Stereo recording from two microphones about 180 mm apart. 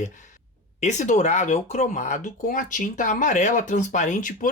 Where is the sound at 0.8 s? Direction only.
40° left (ahead or behind).